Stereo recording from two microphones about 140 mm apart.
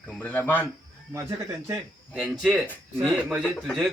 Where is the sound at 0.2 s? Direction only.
10° left (ahead or behind).